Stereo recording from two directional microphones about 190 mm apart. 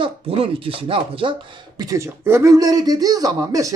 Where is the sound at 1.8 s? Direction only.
15° right (ahead or behind).